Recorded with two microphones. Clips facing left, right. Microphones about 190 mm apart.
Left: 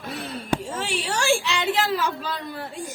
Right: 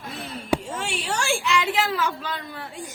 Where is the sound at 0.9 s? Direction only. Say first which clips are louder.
Left 3 dB; 35° left (ahead or behind).